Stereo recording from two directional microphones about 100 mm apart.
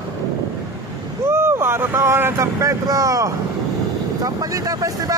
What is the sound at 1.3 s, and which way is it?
Speech, 25° right (ahead or behind).